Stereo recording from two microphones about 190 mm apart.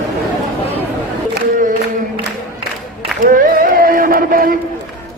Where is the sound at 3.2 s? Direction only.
45° right (ahead or behind).